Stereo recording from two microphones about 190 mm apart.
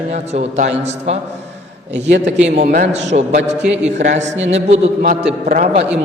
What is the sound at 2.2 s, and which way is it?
A man's voice, 35° right (ahead or behind).